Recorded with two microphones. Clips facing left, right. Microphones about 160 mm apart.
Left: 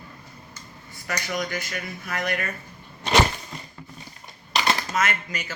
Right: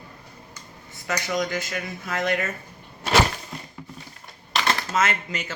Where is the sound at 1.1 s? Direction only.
20° right (ahead or behind).